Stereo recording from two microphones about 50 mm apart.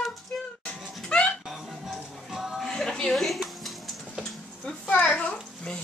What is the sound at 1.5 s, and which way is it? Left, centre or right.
Music, centre.